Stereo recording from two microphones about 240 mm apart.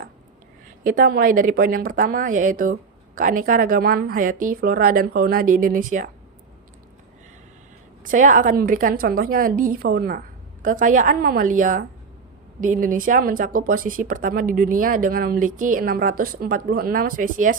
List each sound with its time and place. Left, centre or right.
0.9 s speech: right
8.0 s speech: right